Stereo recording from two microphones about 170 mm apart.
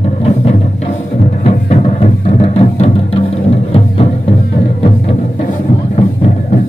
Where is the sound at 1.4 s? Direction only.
35° left (ahead or behind).